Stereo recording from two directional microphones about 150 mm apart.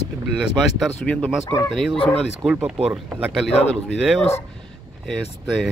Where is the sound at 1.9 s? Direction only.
40° left (ahead or behind).